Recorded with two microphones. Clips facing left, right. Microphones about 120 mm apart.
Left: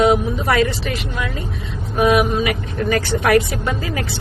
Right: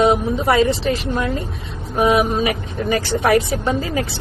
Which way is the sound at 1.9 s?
25° right (ahead or behind).